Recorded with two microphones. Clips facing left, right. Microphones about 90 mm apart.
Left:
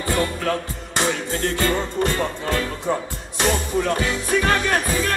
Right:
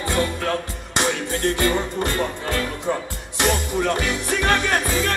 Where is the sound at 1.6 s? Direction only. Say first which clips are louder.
Even; 20° right (ahead or behind).